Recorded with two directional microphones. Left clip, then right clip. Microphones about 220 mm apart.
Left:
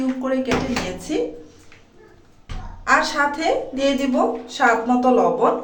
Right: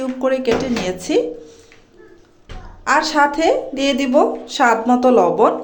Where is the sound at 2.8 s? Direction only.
30° right (ahead or behind).